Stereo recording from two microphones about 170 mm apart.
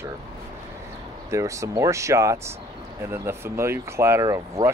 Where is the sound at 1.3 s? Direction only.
15° right (ahead or behind).